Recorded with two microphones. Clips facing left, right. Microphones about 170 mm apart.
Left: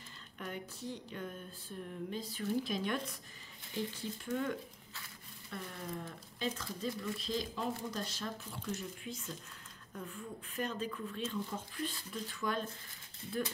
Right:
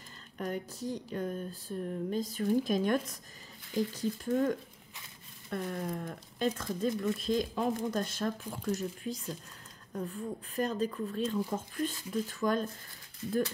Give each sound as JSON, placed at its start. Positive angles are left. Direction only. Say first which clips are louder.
{"t": 0.4, "sound": "speech", "louder": "right 7 dB", "side_deg": -40}